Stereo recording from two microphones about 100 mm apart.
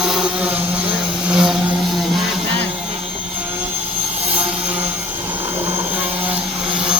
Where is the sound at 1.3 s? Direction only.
5° right (ahead or behind).